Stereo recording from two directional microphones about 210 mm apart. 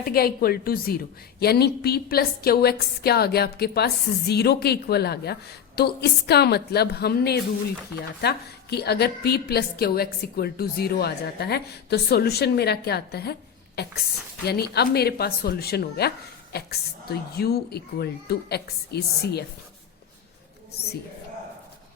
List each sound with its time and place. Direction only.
0.0 s a woman's voice: 45° left (ahead or behind)